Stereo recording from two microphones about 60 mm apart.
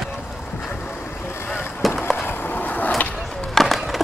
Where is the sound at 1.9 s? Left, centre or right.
Left.